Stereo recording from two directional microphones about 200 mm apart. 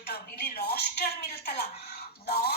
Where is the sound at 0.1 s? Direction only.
55° left (ahead or behind).